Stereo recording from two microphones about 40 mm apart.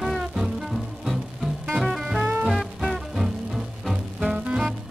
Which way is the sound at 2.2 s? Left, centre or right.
Right.